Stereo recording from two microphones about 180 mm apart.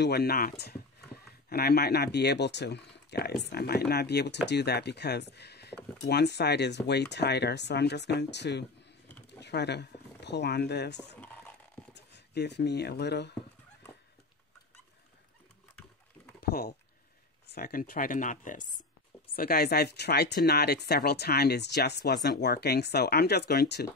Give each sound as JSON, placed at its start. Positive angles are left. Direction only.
{"t": 0.0, "sound": "speech", "side_deg": 65}
{"t": 16.3, "sound": "typing", "side_deg": 60}
{"t": 17.5, "sound": "speech", "side_deg": 55}
{"t": 18.6, "sound": "a sound", "side_deg": 25}
{"t": 19.3, "sound": "speech", "side_deg": 55}